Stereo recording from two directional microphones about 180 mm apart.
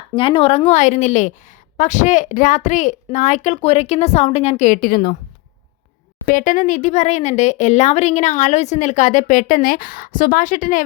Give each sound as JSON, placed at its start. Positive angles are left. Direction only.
{"t": 0.2, "sound": "a woman's voice", "side_deg": 30}
{"t": 6.2, "sound": "speech", "side_deg": 45}